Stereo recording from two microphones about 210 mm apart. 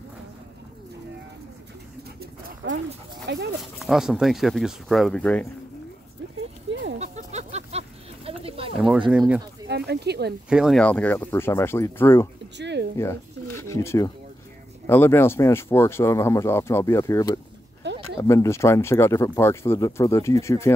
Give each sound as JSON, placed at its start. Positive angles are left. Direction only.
{"t": 2.1, "sound": "dog", "side_deg": -60}
{"t": 3.3, "sound": "speech", "side_deg": -55}
{"t": 3.8, "sound": "speech", "side_deg": 0}
{"t": 6.7, "sound": "a sound", "side_deg": -60}
{"t": 7.0, "sound": "a sound", "side_deg": -30}
{"t": 8.7, "sound": "speech", "side_deg": -5}
{"t": 9.7, "sound": "speech", "side_deg": -50}
{"t": 10.5, "sound": "speech", "side_deg": 0}
{"t": 12.5, "sound": "a sound", "side_deg": -55}
{"t": 12.9, "sound": "bird", "side_deg": 15}
{"t": 14.9, "sound": "speech", "side_deg": 10}
{"t": 17.8, "sound": "a sound", "side_deg": -55}
{"t": 18.2, "sound": "speech", "side_deg": 15}